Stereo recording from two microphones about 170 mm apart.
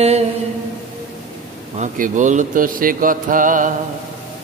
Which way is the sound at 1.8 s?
45° right (ahead or behind).